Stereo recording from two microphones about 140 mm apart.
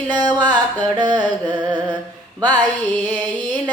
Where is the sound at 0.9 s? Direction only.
30° right (ahead or behind).